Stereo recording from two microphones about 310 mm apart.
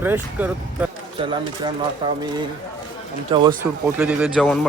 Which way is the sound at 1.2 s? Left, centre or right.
Centre.